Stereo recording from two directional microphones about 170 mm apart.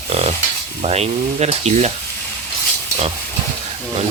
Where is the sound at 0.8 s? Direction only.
40° right (ahead or behind).